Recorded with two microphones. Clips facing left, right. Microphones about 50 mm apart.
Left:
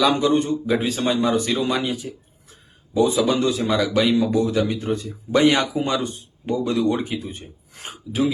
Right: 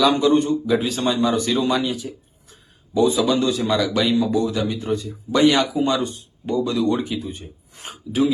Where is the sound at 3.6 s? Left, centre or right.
Centre.